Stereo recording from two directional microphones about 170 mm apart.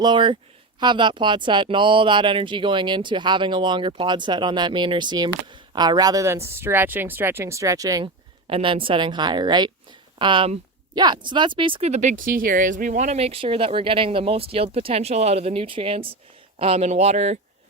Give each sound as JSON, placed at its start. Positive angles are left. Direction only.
{"t": 0.0, "sound": "speech", "side_deg": -30}
{"t": 8.4, "sound": "speech", "side_deg": -30}